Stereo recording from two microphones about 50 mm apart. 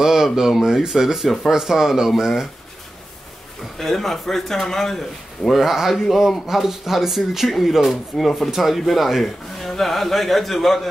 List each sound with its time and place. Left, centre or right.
0.0 s speech: centre
3.7 s speech: centre
5.5 s speech: centre